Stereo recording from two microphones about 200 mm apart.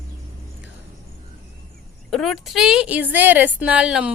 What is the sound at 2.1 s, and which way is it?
A woman's voice, centre (ahead or behind).